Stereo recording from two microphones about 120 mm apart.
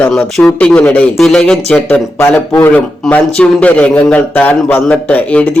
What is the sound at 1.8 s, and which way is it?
A man's voice, 15° left (ahead or behind).